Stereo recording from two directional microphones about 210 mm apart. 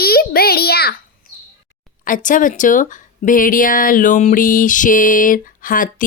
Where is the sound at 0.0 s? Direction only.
45° left (ahead or behind).